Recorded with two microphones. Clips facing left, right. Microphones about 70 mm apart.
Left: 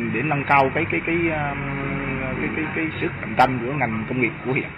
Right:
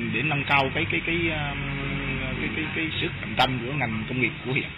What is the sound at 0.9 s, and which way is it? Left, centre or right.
Speech, left.